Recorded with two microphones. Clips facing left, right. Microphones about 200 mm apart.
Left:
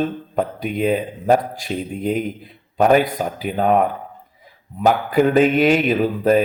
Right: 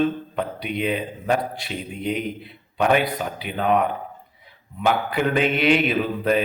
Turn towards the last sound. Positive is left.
turn(degrees=45)  # may be behind; listen again after turning